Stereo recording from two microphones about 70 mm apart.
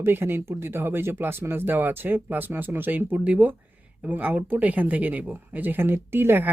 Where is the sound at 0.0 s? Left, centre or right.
Right.